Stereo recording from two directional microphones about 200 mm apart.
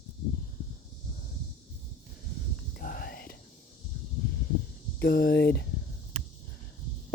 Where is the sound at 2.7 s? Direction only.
50° left (ahead or behind).